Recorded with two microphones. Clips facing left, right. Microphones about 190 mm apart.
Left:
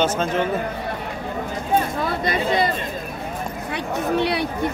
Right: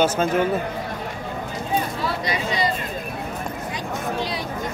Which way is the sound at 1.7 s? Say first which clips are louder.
Left 3 dB; 50° left (ahead or behind).